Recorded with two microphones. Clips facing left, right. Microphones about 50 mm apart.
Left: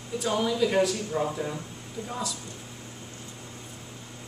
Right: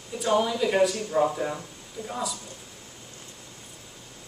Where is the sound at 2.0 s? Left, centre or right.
Centre.